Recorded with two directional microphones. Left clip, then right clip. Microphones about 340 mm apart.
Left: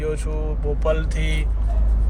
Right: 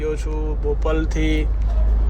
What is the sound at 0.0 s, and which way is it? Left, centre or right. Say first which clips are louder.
Mantra: right 1 dB; centre.